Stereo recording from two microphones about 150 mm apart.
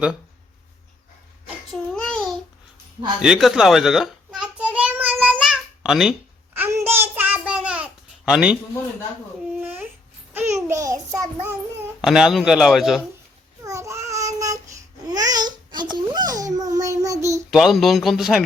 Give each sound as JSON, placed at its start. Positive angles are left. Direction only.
{"t": 1.7, "sound": "child singing", "side_deg": 5}
{"t": 3.2, "sound": "a sound", "side_deg": -5}
{"t": 6.5, "sound": "child singing", "side_deg": -15}
{"t": 9.6, "sound": "babbling", "side_deg": -10}
{"t": 10.3, "sound": "child singing", "side_deg": -20}
{"t": 12.0, "sound": "a man's voice", "side_deg": 0}
{"t": 13.7, "sound": "child singing", "side_deg": -20}
{"t": 17.5, "sound": "a man's voice", "side_deg": 0}